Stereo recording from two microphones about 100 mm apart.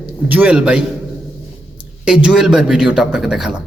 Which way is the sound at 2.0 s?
10° right (ahead or behind).